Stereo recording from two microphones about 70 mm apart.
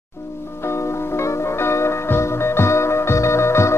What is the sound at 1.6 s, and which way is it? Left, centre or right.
Music, left.